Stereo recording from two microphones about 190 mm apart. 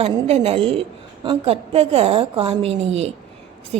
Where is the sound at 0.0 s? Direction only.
30° right (ahead or behind).